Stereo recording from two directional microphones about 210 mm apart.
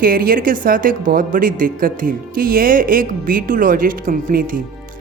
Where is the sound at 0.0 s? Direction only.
45° right (ahead or behind).